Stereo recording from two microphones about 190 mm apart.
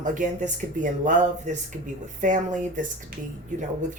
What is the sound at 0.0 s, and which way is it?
Speech, 45° right (ahead or behind).